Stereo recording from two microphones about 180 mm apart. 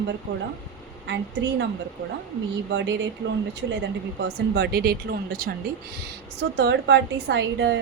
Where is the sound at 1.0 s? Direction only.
80° right.